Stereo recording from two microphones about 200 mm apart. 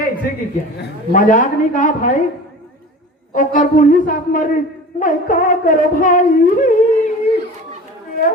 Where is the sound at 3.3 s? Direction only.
40° left (ahead or behind).